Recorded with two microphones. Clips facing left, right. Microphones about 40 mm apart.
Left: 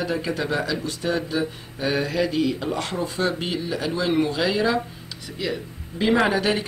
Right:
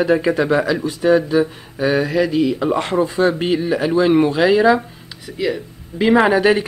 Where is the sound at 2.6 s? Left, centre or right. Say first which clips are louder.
Right 9 dB; right.